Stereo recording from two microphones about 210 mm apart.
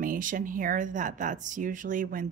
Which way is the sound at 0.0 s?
40° right (ahead or behind).